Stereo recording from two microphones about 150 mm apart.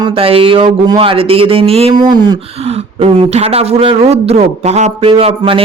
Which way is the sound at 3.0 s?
45° right (ahead or behind).